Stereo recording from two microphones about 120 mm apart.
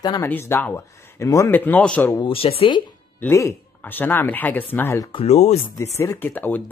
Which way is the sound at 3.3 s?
20° left (ahead or behind).